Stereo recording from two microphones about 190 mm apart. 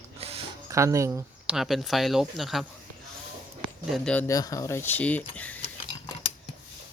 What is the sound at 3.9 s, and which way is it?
Speech, centre (ahead or behind).